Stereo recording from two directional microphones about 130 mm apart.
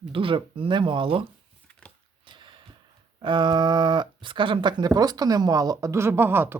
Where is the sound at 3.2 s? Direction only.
35° right (ahead or behind).